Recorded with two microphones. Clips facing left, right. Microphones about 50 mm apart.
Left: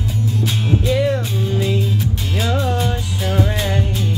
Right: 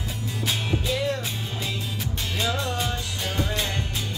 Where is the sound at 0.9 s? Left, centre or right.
Centre.